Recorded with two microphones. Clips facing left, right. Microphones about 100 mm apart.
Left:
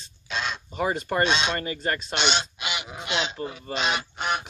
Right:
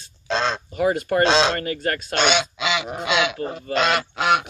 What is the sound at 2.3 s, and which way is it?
Goose, 80° right.